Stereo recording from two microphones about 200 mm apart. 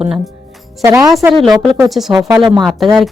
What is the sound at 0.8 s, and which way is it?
Speech, 15° right (ahead or behind).